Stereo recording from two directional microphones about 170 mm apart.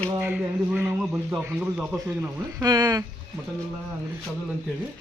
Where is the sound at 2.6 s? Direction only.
25° right (ahead or behind).